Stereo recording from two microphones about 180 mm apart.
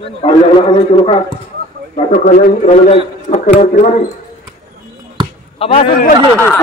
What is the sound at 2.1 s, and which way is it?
A man's voice, 45° left (ahead or behind).